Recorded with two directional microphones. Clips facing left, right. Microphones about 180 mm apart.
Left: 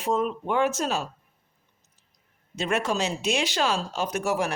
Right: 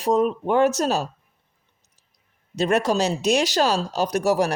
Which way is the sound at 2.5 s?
35° right (ahead or behind).